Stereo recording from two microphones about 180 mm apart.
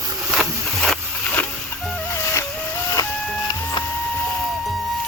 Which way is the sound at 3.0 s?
20° left (ahead or behind).